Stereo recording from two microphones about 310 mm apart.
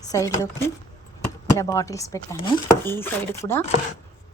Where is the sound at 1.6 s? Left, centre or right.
Centre.